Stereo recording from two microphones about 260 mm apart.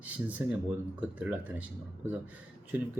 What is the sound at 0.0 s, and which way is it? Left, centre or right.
Speech, centre.